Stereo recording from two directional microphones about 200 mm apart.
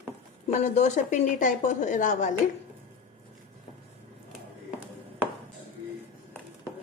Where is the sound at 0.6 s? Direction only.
35° left (ahead or behind).